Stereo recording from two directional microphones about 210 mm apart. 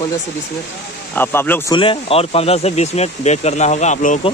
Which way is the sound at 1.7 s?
25° left (ahead or behind).